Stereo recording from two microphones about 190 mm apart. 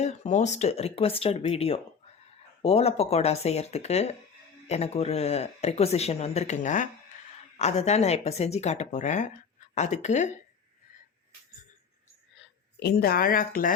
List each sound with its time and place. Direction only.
0.0 s speech: 35° left (ahead or behind)
12.8 s speech: 55° left (ahead or behind)